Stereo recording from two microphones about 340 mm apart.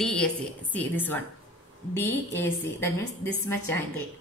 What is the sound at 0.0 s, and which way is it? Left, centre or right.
A woman's voice, centre.